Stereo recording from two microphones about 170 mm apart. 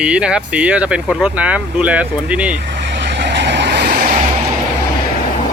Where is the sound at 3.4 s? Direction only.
90° right.